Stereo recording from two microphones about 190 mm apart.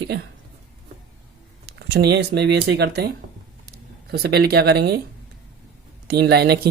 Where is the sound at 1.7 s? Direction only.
60° right (ahead or behind).